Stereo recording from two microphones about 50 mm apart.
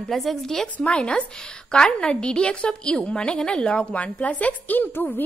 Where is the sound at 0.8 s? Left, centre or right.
Left.